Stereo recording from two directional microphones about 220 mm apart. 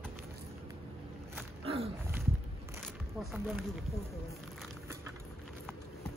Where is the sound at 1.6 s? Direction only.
25° right (ahead or behind).